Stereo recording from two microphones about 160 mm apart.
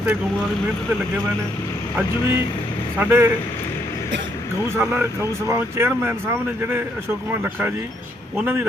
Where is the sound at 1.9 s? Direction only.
15° right (ahead or behind).